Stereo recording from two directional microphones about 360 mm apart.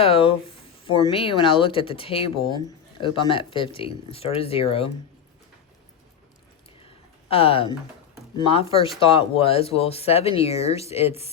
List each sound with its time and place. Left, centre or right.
0.0 s speech: centre
6.7 s a sound: centre
8.4 s speech: centre